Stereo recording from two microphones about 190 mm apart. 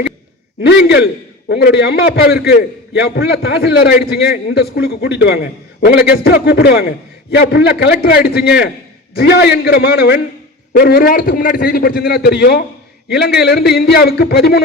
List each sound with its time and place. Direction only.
0.6 s a man's voice: 60° left (ahead or behind)